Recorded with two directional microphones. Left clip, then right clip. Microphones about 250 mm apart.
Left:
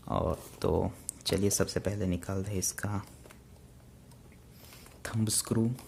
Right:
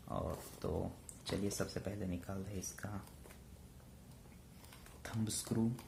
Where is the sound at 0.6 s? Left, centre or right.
Left.